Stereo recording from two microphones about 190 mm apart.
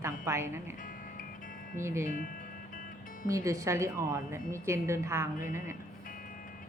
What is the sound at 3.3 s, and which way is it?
A woman's voice, 15° right (ahead or behind).